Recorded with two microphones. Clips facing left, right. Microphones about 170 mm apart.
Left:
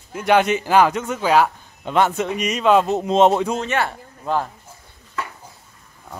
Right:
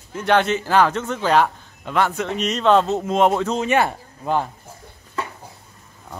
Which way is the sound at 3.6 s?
15° right (ahead or behind).